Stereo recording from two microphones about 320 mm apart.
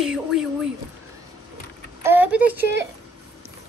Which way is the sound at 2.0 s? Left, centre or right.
Centre.